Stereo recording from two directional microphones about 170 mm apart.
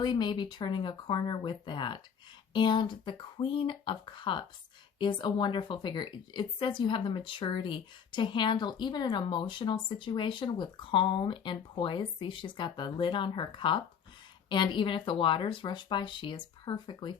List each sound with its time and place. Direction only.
0.0 s a woman's voice: 25° left (ahead or behind)